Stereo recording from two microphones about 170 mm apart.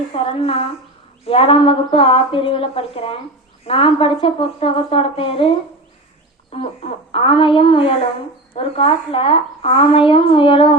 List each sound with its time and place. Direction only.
0.2 s a woman's voice: 35° left (ahead or behind)